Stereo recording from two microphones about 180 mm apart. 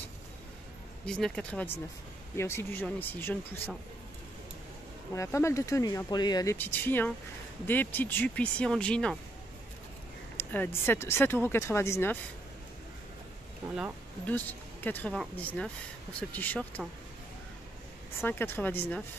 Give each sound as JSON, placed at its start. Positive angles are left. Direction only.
{"t": 1.0, "sound": "speech", "side_deg": 5}
{"t": 5.1, "sound": "speech", "side_deg": 15}
{"t": 10.3, "sound": "speech", "side_deg": 10}
{"t": 14.2, "sound": "speech", "side_deg": 10}
{"t": 18.2, "sound": "speech", "side_deg": 10}